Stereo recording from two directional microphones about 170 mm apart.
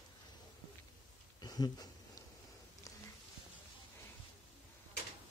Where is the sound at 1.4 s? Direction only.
20° left (ahead or behind).